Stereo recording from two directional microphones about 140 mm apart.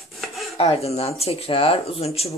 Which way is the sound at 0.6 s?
45° left (ahead or behind).